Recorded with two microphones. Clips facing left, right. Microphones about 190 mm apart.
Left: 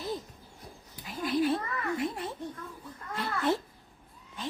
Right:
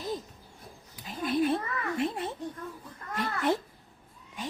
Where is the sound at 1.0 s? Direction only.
20° right (ahead or behind).